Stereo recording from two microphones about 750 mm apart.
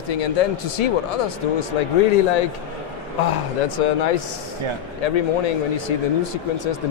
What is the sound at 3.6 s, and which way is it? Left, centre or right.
Speech, left.